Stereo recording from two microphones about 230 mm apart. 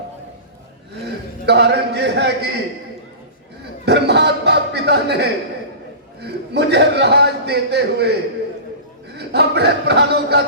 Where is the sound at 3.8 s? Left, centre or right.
Right.